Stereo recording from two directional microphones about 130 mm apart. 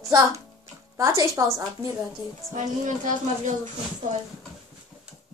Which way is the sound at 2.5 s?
75° right (ahead or behind).